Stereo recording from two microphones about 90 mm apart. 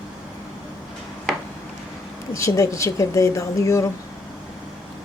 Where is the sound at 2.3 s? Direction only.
35° left (ahead or behind).